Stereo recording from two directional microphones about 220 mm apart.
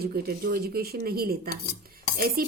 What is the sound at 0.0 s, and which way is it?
A woman's voice, 45° right (ahead or behind).